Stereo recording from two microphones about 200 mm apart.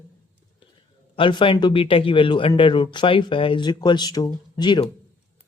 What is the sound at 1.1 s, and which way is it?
Speech, 25° left (ahead or behind).